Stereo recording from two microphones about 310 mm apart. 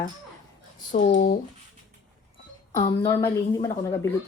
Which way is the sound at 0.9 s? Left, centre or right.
Left.